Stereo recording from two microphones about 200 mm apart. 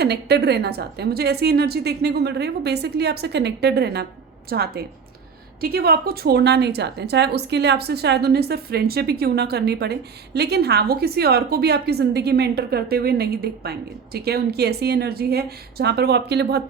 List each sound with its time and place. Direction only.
0.0 s a woman's voice: 55° right (ahead or behind)